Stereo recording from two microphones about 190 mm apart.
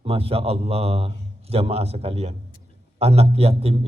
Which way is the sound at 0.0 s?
30° right (ahead or behind).